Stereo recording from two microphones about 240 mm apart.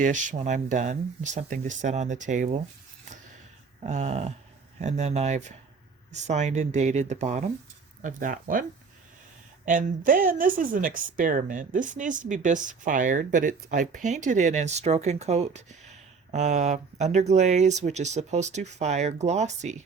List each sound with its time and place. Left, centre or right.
0.0 s speech: right
3.8 s speech: right
9.6 s speech: right